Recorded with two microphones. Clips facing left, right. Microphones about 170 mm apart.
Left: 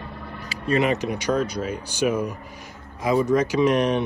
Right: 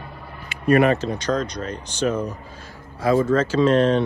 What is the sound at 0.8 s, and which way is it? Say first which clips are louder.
Speech: right 3 dB; 15° left (ahead or behind).